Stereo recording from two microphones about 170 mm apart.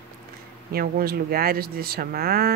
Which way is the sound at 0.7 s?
60° right (ahead or behind).